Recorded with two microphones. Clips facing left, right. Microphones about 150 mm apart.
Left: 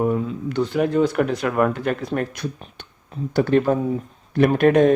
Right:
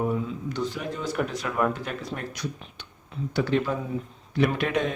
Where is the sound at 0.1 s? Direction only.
60° left (ahead or behind).